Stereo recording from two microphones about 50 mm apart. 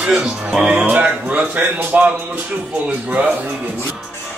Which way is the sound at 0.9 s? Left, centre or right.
Right.